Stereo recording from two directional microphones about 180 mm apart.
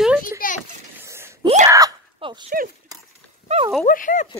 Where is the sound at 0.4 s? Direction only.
50° left (ahead or behind).